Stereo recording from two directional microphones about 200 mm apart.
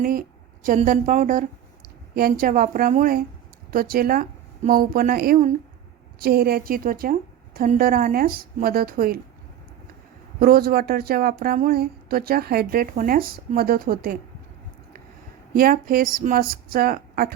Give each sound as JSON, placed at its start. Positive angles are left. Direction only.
{"t": 0.0, "sound": "a woman's voice", "side_deg": -45}
{"t": 10.4, "sound": "a woman's voice", "side_deg": -50}
{"t": 15.5, "sound": "a woman's voice", "side_deg": -45}